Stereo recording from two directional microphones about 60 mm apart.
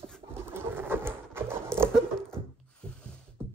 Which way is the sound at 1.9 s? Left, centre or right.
Centre.